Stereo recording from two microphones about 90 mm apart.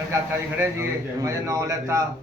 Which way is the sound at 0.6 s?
35° right (ahead or behind).